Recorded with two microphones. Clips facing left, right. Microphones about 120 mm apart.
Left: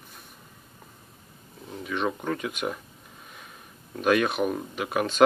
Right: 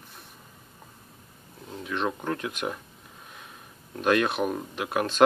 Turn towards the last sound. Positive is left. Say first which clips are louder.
# left 1 dB
turn(degrees=0)  # may be behind; listen again after turning